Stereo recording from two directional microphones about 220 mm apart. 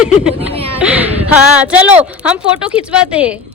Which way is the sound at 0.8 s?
5° right (ahead or behind).